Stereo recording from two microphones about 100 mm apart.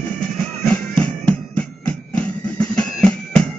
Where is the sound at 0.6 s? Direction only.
10° left (ahead or behind).